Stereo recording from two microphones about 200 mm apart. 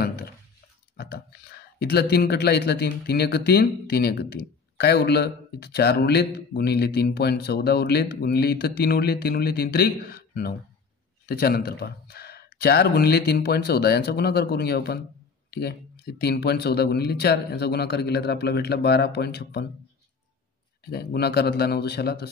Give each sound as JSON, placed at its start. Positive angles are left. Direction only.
{"t": 0.0, "sound": "a sound", "side_deg": 50}
{"t": 0.9, "sound": "speech", "side_deg": 50}
{"t": 20.8, "sound": "speech", "side_deg": 50}